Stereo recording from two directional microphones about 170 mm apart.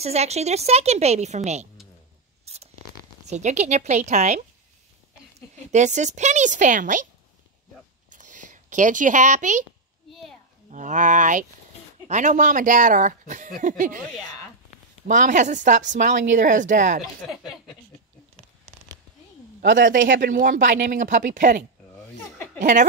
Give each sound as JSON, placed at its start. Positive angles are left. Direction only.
{"t": 0.0, "sound": "a woman's voice", "side_deg": -40}
{"t": 2.4, "sound": "zipper", "side_deg": -40}
{"t": 3.3, "sound": "a woman's voice", "side_deg": -45}
{"t": 5.7, "sound": "a woman's voice", "side_deg": -45}
{"t": 8.1, "sound": "a sound", "side_deg": -50}
{"t": 10.7, "sound": "a woman's voice", "side_deg": -45}
{"t": 15.0, "sound": "a woman's voice", "side_deg": -45}
{"t": 17.3, "sound": "speech", "side_deg": 0}
{"t": 20.0, "sound": "speech", "side_deg": -90}
{"t": 20.2, "sound": "a woman's voice", "side_deg": -50}